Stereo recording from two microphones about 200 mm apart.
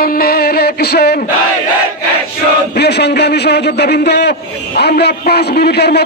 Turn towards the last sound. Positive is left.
turn(degrees=55)  # may be behind; listen again after turning